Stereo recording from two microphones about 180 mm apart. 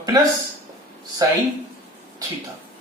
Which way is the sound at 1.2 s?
20° right (ahead or behind).